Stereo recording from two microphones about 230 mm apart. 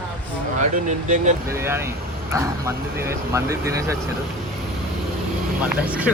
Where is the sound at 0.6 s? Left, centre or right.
Right.